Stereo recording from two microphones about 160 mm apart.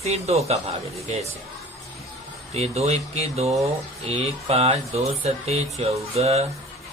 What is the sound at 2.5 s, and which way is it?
Speech, 40° right (ahead or behind).